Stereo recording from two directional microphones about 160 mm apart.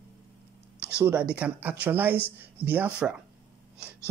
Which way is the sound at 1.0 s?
10° right (ahead or behind).